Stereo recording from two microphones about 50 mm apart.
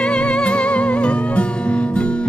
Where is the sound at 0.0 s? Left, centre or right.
Left.